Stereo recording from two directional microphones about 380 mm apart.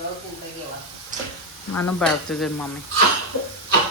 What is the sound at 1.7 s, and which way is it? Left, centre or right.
Speech, centre.